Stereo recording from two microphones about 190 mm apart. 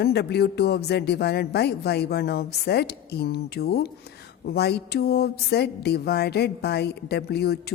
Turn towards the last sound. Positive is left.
turn(degrees=60)  # may be behind; listen again after turning